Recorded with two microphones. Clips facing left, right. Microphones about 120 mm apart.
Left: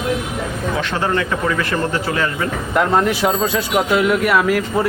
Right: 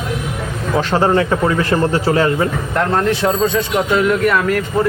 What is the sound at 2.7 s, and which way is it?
Speech, 10° left (ahead or behind).